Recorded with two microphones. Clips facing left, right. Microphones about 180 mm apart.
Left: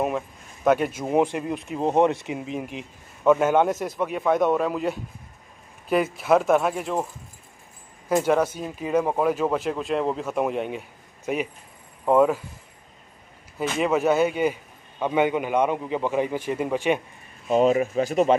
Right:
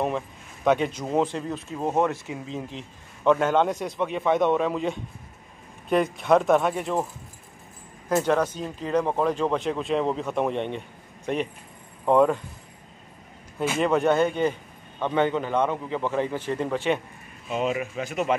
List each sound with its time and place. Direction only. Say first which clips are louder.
0.7 s speech: left 2 dB; 5° left (ahead or behind)
8.1 s speech: left 2 dB; 10° left (ahead or behind)
13.7 s speech: left 1 dB; 5° left (ahead or behind)
17.5 s speech: left 7 dB; 40° left (ahead or behind)